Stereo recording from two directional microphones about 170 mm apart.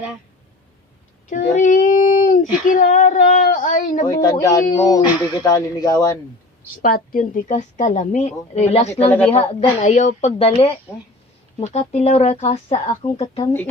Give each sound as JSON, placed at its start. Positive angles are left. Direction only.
{"t": 1.3, "sound": "a sound", "side_deg": 50}
{"t": 4.0, "sound": "speech", "side_deg": 25}
{"t": 6.8, "sound": "a woman's voice", "side_deg": 55}
{"t": 9.0, "sound": "speech", "side_deg": 10}
{"t": 9.3, "sound": "speech", "side_deg": 35}
{"t": 10.9, "sound": "speech", "side_deg": 10}
{"t": 11.6, "sound": "speech", "side_deg": 40}